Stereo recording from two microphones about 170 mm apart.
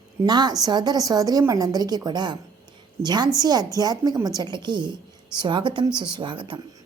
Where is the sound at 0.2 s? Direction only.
25° right (ahead or behind).